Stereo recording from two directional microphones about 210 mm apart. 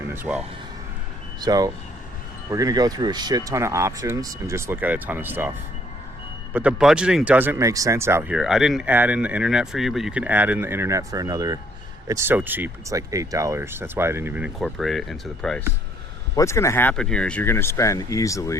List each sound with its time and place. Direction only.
0.1 s speech: 10° right (ahead or behind)
6.5 s speech: 5° right (ahead or behind)
16.3 s speech: 15° left (ahead or behind)